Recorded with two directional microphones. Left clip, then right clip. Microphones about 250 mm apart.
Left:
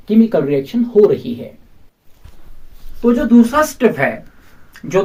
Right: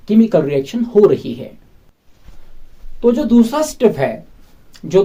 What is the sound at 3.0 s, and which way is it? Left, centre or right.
Speech, right.